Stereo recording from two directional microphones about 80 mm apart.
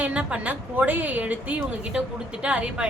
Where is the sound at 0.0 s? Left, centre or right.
Centre.